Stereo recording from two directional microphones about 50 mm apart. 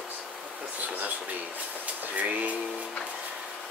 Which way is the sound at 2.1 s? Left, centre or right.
Right.